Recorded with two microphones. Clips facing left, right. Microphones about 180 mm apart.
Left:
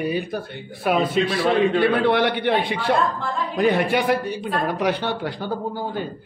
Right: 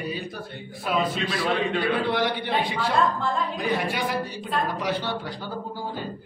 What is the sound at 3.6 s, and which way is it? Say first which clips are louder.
A man's voice: left 7 dB; 65° left (ahead or behind).